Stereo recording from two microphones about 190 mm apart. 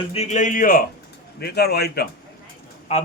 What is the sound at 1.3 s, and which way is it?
Speech, 55° left (ahead or behind).